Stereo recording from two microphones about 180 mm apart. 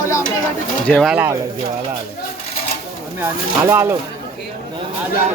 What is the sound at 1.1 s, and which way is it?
Speech, 15° right (ahead or behind).